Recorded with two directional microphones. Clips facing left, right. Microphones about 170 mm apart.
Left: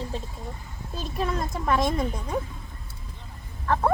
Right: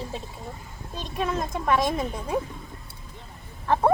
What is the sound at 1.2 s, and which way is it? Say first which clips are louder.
Speech: right 1 dB; centre (ahead or behind).